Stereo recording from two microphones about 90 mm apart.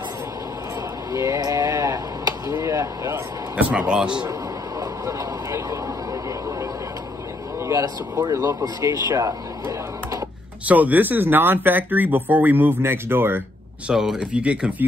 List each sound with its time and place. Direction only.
1.1 s a sound: 40° right (ahead or behind)
3.5 s speech: 10° right (ahead or behind)
4.7 s speech: 35° right (ahead or behind)
7.6 s speech: 40° right (ahead or behind)
10.7 s speech: 20° right (ahead or behind)
13.8 s speech: 5° right (ahead or behind)